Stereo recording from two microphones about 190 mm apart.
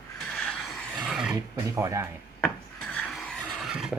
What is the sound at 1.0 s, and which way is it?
Filing, centre (ahead or behind).